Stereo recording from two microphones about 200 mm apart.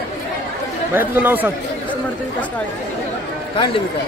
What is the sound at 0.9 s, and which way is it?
Speech, 10° right (ahead or behind).